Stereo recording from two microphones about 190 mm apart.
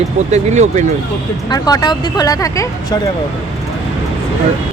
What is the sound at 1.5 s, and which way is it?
Speech, 20° left (ahead or behind).